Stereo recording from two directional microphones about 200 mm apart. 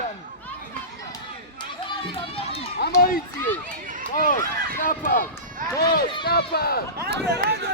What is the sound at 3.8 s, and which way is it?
Run, 40° right (ahead or behind).